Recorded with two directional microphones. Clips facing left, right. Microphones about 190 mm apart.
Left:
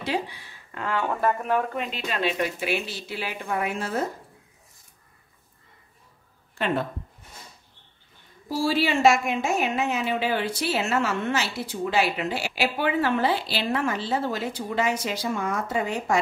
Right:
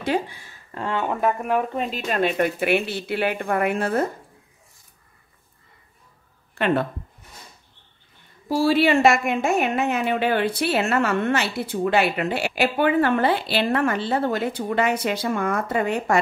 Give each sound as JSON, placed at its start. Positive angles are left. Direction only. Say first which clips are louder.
{"t": 0.0, "sound": "speech", "louder": "right 4 dB", "side_deg": -50}
{"t": 0.7, "sound": "speech", "louder": "right 2 dB", "side_deg": -30}
{"t": 1.4, "sound": "speech", "louder": "right 2 dB", "side_deg": -10}
{"t": 1.7, "sound": "speech", "louder": "right 4 dB", "side_deg": -35}
{"t": 2.0, "sound": "a woman's voice", "louder": "right 5 dB", "side_deg": -50}
{"t": 6.5, "sound": "speech", "louder": "right 5 dB", "side_deg": -65}
{"t": 8.5, "sound": "a woman's voice", "louder": "right 6 dB", "side_deg": -60}